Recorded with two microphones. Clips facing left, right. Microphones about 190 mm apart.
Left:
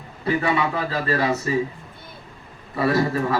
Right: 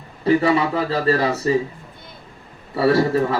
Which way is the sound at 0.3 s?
35° right (ahead or behind).